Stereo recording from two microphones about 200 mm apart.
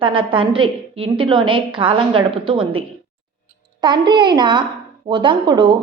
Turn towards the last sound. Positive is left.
turn(degrees=-20)  # may be behind; listen again after turning